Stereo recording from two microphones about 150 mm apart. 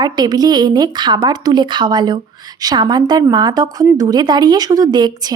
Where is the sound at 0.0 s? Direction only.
25° right (ahead or behind).